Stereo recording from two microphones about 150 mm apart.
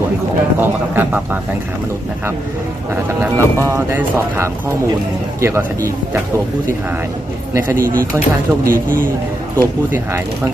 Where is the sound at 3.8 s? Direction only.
15° right (ahead or behind).